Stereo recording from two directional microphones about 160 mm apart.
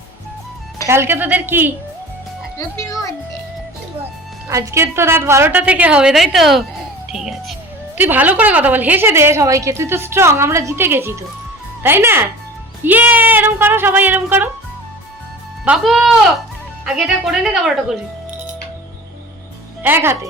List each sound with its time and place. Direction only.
0.9 s a woman's voice: 15° right (ahead or behind)
2.6 s a child's voice: 20° left (ahead or behind)
4.4 s a woman's voice: 20° right (ahead or behind)
15.6 s speech: 5° right (ahead or behind)
19.8 s a woman's voice: 15° right (ahead or behind)